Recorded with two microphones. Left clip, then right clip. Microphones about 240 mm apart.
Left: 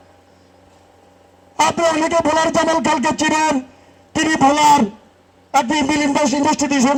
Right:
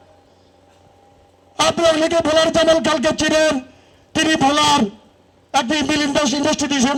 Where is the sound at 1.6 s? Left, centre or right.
Centre.